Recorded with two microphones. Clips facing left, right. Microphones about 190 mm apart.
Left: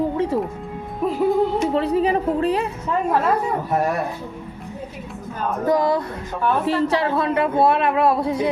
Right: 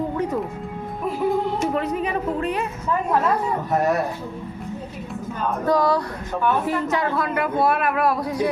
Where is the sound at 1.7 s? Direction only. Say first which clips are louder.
Left 5 dB; 30° left (ahead or behind).